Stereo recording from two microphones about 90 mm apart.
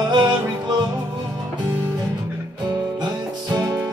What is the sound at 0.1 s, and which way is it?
Music, 55° right (ahead or behind).